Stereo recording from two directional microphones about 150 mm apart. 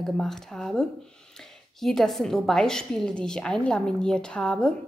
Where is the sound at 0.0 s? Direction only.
Centre (ahead or behind).